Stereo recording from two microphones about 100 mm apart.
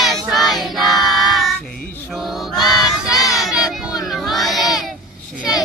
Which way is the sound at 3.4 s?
5° right (ahead or behind).